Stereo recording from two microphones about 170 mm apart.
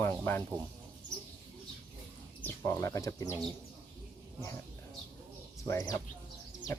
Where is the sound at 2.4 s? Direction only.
15° left (ahead or behind).